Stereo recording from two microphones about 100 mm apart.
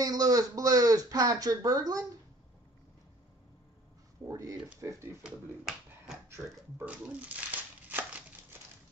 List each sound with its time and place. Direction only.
0.0 s speech: 40° right (ahead or behind)
4.3 s speech: 35° right (ahead or behind)
5.2 s speech: 10° right (ahead or behind)
6.2 s pig: 25° right (ahead or behind)
7.2 s crumpling: 15° right (ahead or behind)